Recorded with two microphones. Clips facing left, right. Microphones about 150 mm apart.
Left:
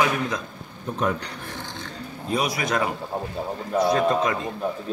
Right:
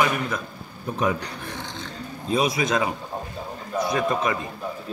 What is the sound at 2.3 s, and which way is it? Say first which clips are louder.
Speech: right 2 dB; 25° right (ahead or behind).